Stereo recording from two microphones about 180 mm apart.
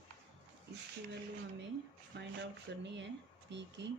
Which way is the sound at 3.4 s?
75° right (ahead or behind).